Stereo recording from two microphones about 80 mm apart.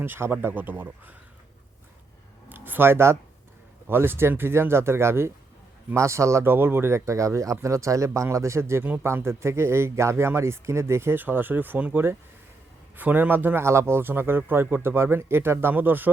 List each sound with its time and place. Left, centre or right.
0.0 s speech: right
2.5 s a sound: right
3.8 s speech: right